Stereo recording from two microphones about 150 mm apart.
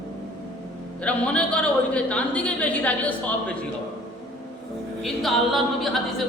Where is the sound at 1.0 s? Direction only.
10° left (ahead or behind).